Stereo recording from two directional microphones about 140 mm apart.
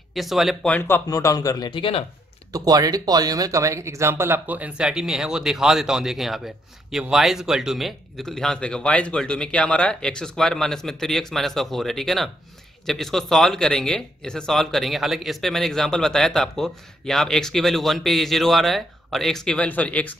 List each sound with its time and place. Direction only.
0.1 s speech: centre (ahead or behind)
0.7 s speech: 15° left (ahead or behind)
1.0 s speech: 25° left (ahead or behind)
2.5 s speech: 25° right (ahead or behind); by 20.2 s 10° left (ahead or behind)